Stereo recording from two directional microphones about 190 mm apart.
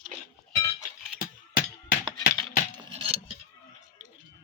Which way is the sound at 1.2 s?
45° left (ahead or behind).